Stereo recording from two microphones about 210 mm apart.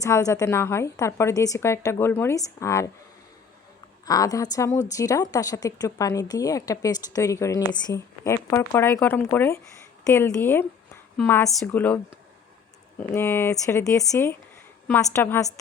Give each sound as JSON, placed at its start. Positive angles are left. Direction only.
{"t": 0.0, "sound": "speech", "side_deg": 15}
{"t": 4.0, "sound": "a woman's voice", "side_deg": 15}
{"t": 13.0, "sound": "speech", "side_deg": 10}